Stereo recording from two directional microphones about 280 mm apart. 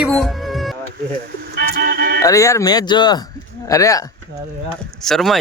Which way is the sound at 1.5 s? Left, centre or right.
Right.